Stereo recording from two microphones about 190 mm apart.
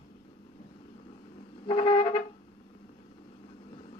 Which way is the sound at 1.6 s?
25° left (ahead or behind).